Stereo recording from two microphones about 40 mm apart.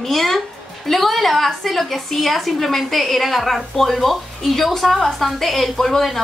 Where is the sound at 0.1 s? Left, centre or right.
Centre.